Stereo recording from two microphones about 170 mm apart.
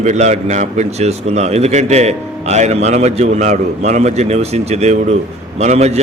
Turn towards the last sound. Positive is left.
turn(degrees=-40)  # may be behind; listen again after turning